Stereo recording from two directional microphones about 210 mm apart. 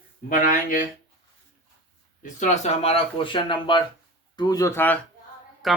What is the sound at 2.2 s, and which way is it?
Speech, 35° left (ahead or behind).